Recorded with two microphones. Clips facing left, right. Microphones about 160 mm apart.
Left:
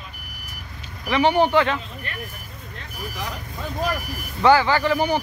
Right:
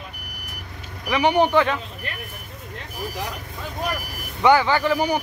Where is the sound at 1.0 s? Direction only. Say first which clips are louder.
Even; 15° right (ahead or behind).